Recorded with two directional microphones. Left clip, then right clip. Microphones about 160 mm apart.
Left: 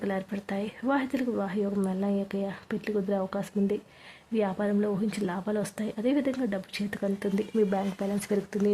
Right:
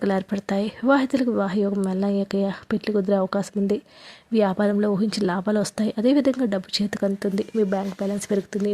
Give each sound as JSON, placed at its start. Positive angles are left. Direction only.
{"t": 0.0, "sound": "speech", "side_deg": -35}